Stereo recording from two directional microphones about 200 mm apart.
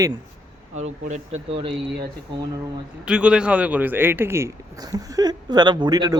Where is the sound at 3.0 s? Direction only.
5° right (ahead or behind).